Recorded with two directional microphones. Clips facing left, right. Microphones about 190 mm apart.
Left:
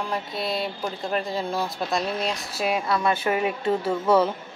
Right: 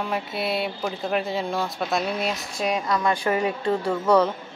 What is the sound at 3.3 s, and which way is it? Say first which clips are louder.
Speech: right 1 dB; 20° left (ahead or behind).